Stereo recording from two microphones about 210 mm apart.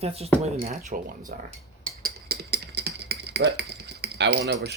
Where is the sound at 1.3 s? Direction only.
45° right (ahead or behind).